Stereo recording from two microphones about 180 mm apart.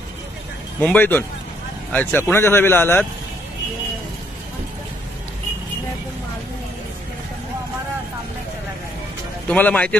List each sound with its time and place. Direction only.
0.7 s a man's voice: 10° left (ahead or behind)
9.5 s a man's voice: 10° left (ahead or behind)